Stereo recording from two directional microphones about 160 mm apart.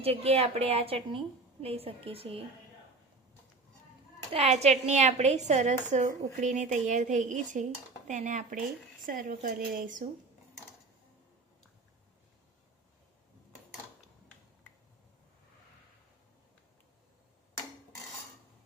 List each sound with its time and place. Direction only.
0.0 s a woman's voice: 35° right (ahead or behind)
4.3 s a woman's voice: 40° right (ahead or behind)